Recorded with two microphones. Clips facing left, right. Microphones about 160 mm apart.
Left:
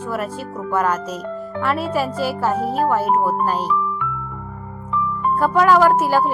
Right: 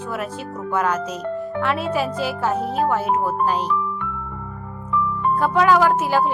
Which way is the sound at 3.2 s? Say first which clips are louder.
Left 1 dB; 5° left (ahead or behind).